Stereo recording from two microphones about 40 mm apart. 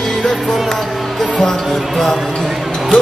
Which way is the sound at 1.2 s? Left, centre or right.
Centre.